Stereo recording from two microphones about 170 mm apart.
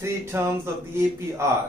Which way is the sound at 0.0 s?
15° right (ahead or behind).